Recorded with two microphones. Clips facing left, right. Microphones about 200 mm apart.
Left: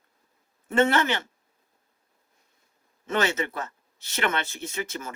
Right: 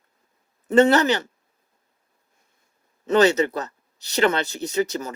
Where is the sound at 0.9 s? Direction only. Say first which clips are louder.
Right 6 dB; 40° right (ahead or behind).